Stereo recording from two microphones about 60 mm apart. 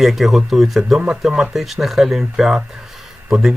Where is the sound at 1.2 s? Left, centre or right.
Centre.